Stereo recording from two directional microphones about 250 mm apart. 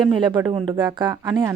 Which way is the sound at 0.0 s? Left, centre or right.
Centre.